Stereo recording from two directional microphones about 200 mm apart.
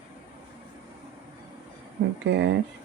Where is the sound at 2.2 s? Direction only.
60° right (ahead or behind).